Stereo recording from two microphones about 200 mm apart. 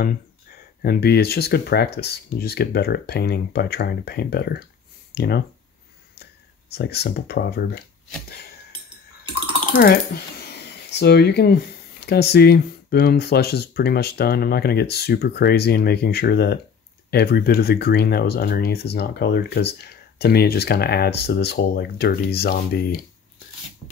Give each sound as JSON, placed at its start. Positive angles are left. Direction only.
{"t": 0.8, "sound": "speech", "side_deg": 50}
{"t": 6.7, "sound": "speech", "side_deg": 55}
{"t": 9.8, "sound": "speech", "side_deg": 50}